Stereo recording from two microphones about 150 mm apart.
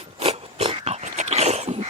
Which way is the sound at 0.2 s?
40° right (ahead or behind).